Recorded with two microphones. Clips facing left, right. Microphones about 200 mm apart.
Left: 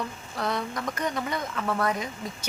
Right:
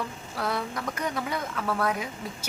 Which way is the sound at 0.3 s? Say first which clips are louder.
Left 1 dB; 5° right (ahead or behind).